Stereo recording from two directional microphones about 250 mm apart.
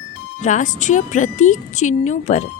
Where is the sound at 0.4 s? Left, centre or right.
Left.